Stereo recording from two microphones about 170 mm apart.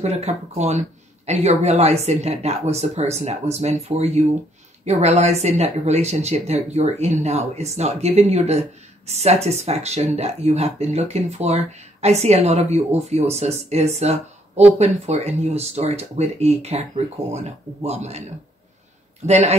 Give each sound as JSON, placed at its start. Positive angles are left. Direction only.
{"t": 0.0, "sound": "speech", "side_deg": -40}
{"t": 19.2, "sound": "speech", "side_deg": -40}